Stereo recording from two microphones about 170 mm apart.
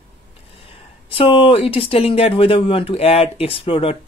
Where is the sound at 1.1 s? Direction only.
30° left (ahead or behind).